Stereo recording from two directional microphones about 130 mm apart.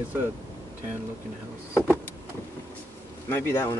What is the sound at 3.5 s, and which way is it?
Speech, 20° left (ahead or behind).